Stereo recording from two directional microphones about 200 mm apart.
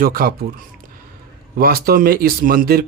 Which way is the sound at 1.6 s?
50° right (ahead or behind).